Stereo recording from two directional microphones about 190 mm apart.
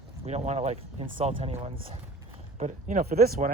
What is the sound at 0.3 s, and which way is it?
Speech, 35° right (ahead or behind).